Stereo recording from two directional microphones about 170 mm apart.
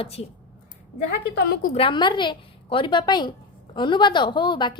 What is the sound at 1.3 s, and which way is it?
Speech, 70° left (ahead or behind).